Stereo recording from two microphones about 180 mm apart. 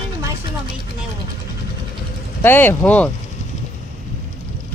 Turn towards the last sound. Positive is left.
turn(degrees=10)  # may be behind; listen again after turning